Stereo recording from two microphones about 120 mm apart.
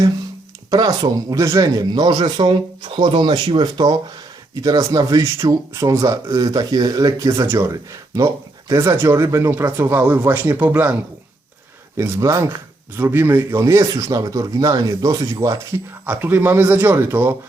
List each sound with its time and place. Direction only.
0.7 s speech: 35° right (ahead or behind)
16.0 s speech: 15° right (ahead or behind)